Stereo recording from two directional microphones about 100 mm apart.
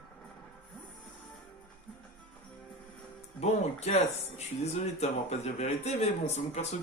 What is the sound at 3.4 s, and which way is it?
Speech, 90° left.